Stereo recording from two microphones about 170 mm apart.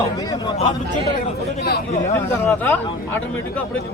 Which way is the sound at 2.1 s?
15° left (ahead or behind).